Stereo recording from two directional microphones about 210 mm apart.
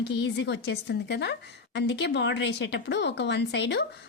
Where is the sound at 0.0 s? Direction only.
55° left (ahead or behind).